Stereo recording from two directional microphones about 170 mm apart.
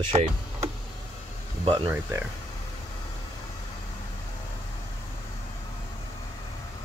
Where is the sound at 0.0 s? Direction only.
35° right (ahead or behind).